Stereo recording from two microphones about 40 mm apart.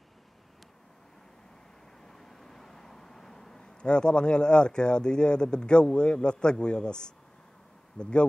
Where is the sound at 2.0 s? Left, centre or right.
Centre.